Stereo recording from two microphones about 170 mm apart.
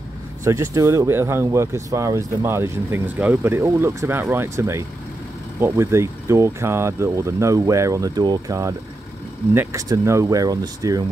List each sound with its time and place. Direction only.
0.4 s speech: 20° right (ahead or behind)